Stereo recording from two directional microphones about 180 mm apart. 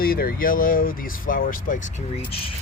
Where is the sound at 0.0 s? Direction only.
55° left (ahead or behind).